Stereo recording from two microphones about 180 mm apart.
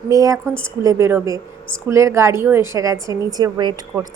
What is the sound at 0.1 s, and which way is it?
A woman's voice, 20° right (ahead or behind).